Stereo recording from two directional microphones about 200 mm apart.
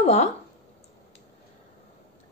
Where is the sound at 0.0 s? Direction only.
35° left (ahead or behind).